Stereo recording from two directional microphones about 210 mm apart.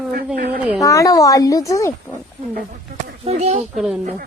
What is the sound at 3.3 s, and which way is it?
Speech, 30° right (ahead or behind).